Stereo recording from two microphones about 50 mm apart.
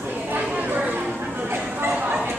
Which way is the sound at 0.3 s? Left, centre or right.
Right.